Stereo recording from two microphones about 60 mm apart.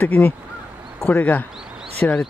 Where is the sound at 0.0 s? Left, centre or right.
Left.